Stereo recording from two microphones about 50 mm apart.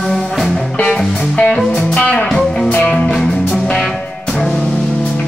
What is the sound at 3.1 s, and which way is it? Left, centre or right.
Music, centre.